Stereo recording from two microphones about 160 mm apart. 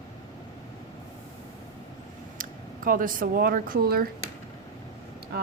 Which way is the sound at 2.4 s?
60° right (ahead or behind).